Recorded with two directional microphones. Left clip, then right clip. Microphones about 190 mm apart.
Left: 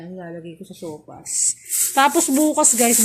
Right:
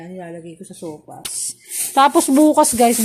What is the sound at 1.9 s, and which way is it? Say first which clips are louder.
Speech: right 4 dB; 20° right (ahead or behind).